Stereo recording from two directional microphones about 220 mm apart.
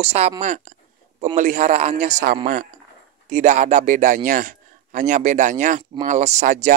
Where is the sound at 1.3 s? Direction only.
35° right (ahead or behind).